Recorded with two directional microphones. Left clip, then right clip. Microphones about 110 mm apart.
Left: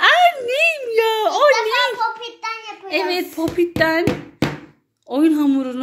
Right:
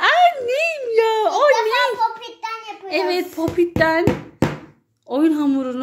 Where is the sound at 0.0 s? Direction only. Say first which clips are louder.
Left 1 dB; 15° left (ahead or behind).